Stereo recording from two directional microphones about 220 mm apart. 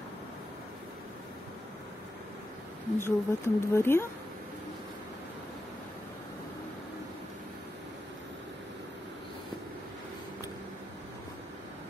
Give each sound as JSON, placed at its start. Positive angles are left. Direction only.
{"t": 3.0, "sound": "speech", "side_deg": 10}